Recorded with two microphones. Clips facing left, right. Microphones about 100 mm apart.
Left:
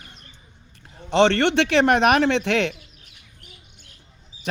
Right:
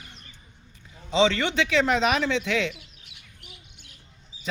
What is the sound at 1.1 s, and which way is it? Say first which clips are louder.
Speech: left 5 dB; 65° left (ahead or behind).